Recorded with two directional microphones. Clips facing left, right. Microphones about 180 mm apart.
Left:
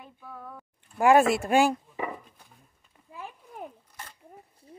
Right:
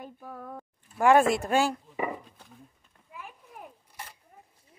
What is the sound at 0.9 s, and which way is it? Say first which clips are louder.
Speech: left 1 dB; 10° left (ahead or behind).